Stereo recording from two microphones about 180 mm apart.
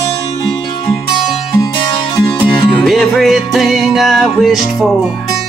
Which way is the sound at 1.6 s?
20° left (ahead or behind).